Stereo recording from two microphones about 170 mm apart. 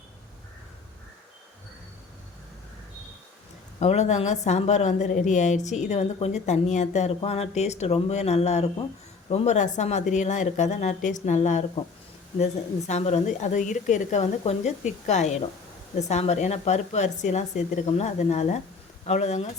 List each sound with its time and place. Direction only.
3.8 s a woman's voice: 40° left (ahead or behind)
12.9 s a woman's voice: 40° left (ahead or behind)